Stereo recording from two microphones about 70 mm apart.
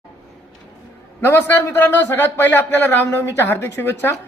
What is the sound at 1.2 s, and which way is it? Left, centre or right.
Speech, left.